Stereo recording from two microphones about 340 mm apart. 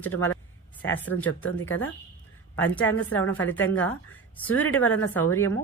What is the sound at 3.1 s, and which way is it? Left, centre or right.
Speech, centre.